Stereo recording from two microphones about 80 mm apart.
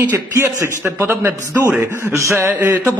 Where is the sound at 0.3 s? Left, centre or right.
Right.